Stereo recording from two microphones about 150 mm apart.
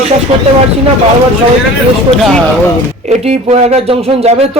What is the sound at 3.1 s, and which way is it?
Speech, 45° right (ahead or behind).